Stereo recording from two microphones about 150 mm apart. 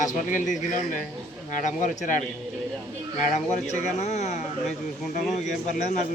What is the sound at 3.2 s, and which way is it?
Speech, 55° left (ahead or behind).